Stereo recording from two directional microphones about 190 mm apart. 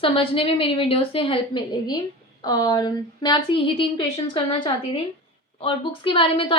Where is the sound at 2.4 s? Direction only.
20° left (ahead or behind).